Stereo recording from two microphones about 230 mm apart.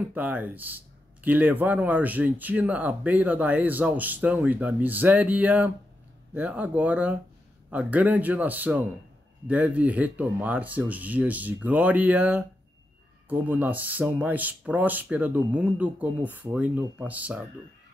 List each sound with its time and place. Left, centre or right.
0.0 s speech: centre